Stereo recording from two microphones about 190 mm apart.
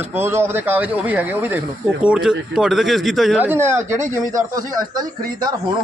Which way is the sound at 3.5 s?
15° right (ahead or behind).